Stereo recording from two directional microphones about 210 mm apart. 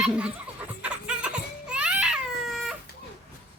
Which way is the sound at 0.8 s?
5° right (ahead or behind).